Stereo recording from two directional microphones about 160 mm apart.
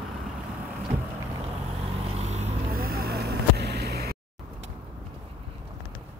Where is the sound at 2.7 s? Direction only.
70° right (ahead or behind).